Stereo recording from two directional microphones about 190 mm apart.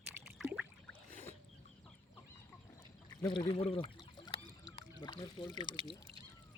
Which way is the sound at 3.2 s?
30° left (ahead or behind).